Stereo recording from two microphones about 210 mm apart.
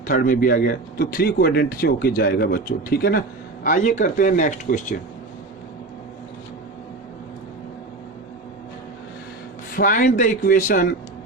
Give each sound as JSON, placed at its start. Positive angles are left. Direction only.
{"t": 0.1, "sound": "speech", "side_deg": 40}
{"t": 9.7, "sound": "speech", "side_deg": 40}